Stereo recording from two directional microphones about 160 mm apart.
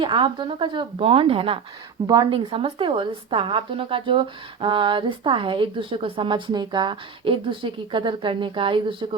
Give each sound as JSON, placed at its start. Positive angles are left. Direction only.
{"t": 0.0, "sound": "a woman's voice", "side_deg": -30}